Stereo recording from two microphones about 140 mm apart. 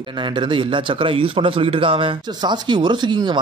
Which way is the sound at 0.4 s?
35° right (ahead or behind).